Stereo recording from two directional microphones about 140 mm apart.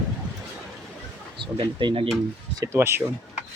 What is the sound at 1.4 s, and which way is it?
Speech, 35° right (ahead or behind).